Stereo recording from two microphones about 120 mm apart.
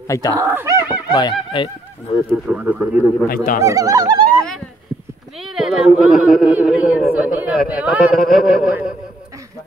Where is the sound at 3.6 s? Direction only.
25° right (ahead or behind).